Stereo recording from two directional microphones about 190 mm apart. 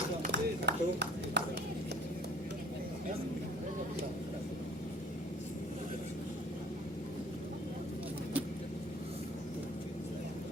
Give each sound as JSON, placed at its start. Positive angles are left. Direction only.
{"t": 0.3, "sound": "ping", "side_deg": -65}